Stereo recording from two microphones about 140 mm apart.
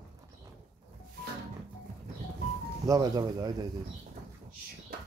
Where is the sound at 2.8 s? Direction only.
25° right (ahead or behind).